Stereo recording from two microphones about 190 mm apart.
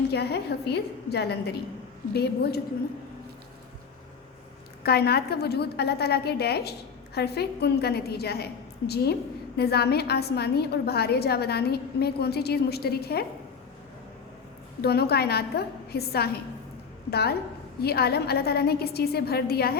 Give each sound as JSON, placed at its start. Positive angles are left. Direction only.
{"t": 0.1, "sound": "a woman's voice", "side_deg": 60}
{"t": 4.8, "sound": "a woman's voice", "side_deg": 55}
{"t": 14.8, "sound": "a woman's voice", "side_deg": 60}